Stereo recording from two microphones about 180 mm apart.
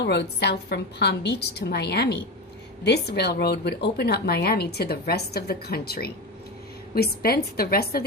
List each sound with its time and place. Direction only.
0.0 s a woman's voice: 70° left (ahead or behind)